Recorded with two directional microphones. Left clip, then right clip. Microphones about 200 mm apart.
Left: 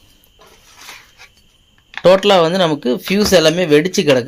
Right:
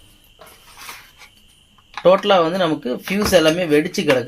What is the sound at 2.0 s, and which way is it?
Speech, 50° left (ahead or behind).